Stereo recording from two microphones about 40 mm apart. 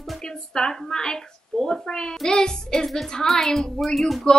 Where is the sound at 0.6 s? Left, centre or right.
Centre.